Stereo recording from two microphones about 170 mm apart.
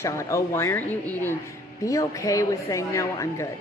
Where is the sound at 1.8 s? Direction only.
20° left (ahead or behind).